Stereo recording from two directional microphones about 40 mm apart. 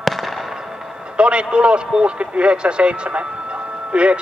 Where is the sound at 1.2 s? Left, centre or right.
Right.